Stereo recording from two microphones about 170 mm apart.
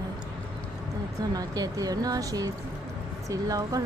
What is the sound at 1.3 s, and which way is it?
Speech, 20° right (ahead or behind).